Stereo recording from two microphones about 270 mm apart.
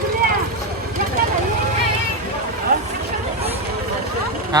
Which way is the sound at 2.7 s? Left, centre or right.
Right.